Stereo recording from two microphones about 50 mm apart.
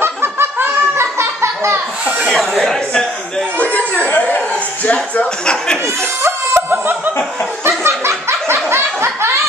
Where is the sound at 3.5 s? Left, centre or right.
Left.